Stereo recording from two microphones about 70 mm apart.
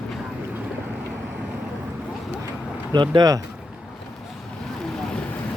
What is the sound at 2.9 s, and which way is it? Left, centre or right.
Speech, right.